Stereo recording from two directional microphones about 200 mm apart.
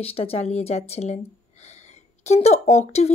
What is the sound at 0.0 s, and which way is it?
Speech, 30° left (ahead or behind).